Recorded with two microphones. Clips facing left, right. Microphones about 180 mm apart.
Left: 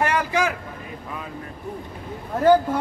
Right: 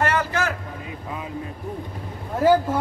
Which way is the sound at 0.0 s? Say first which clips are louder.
Left 1 dB; 15° left (ahead or behind).